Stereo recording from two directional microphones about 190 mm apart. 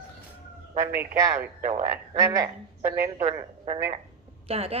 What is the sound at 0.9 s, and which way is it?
Speech, 15° right (ahead or behind).